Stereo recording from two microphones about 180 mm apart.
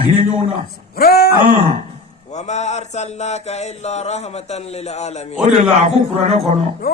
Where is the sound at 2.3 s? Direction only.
40° left (ahead or behind).